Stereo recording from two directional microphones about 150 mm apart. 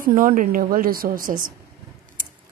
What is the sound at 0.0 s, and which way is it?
A woman's voice, 65° right (ahead or behind).